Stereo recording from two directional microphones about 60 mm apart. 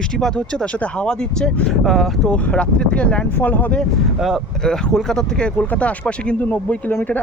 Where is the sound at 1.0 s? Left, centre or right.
Centre.